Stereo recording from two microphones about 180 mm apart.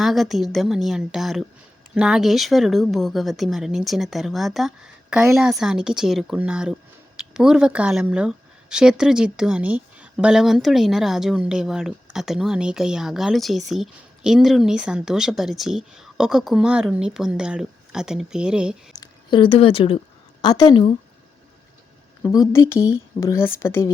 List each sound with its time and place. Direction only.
0.0 s speech: centre (ahead or behind)
18.9 s a woman's voice: 25° left (ahead or behind)
22.3 s speech: 15° left (ahead or behind)